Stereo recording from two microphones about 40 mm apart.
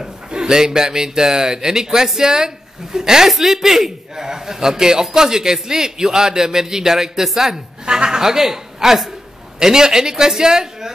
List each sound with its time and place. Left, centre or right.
0.0 s speech: centre
7.8 s speech: right